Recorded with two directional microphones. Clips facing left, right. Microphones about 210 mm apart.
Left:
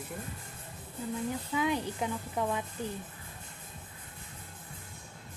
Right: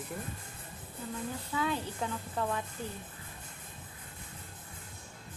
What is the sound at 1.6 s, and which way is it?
Speech, 15° left (ahead or behind).